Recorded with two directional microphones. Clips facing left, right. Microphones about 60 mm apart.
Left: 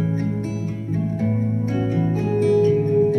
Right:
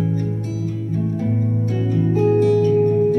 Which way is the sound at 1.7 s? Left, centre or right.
Left.